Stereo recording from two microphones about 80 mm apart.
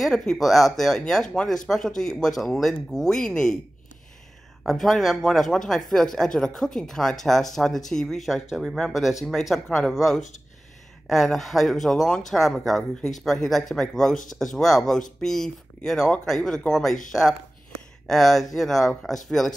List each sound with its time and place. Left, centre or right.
0.0 s speech: centre
4.6 s speech: centre